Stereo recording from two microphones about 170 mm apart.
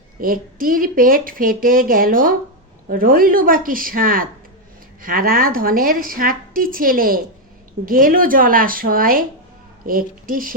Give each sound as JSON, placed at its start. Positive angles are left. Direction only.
{"t": 0.2, "sound": "a woman's voice", "side_deg": -55}